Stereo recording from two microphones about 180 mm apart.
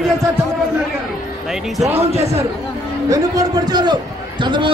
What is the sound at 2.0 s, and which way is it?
Speech, 35° right (ahead or behind).